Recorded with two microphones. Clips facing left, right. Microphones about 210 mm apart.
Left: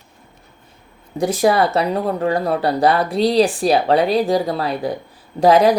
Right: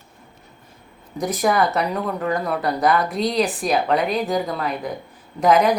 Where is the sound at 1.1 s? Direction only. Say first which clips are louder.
Left 4 dB; 30° left (ahead or behind).